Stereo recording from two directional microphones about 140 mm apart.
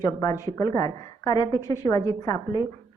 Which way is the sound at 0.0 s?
25° left (ahead or behind).